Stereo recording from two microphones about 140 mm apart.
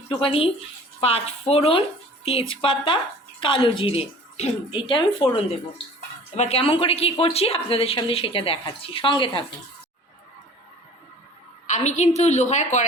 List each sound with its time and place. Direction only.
0.2 s speech: 40° left (ahead or behind)
6.3 s speech: 50° left (ahead or behind)
11.6 s a woman's voice: 60° left (ahead or behind)